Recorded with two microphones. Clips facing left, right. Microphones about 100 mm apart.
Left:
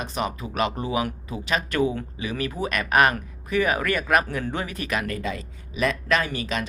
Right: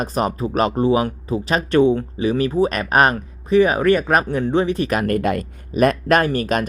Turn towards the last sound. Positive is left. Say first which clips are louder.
# right 8 dB
turn(degrees=-50)  # may be behind; listen again after turning